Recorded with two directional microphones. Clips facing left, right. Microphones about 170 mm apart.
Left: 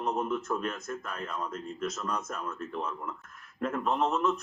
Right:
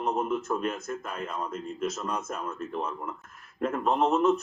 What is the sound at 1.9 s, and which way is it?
Speech, 25° right (ahead or behind).